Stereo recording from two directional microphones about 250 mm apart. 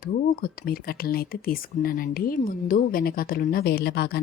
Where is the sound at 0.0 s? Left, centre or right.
Left.